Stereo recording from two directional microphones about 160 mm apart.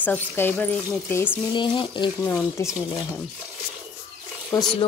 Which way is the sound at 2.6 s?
20° left (ahead or behind).